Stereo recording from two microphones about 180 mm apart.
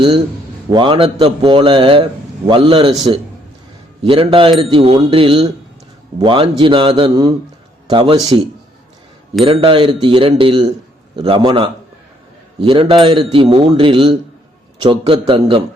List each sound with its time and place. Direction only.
0.7 s speech: 25° right (ahead or behind)
9.4 s speech: 30° right (ahead or behind)